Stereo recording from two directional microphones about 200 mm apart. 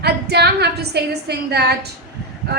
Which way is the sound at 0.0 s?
55° right (ahead or behind).